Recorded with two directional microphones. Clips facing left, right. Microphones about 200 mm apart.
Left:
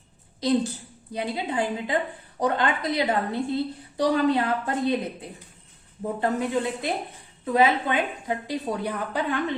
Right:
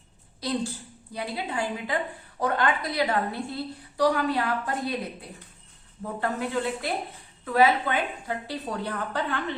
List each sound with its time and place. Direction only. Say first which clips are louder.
0.3 s a woman's voice: left 6 dB; 20° left (ahead or behind)
6.0 s a woman's voice: left 4 dB; 20° left (ahead or behind)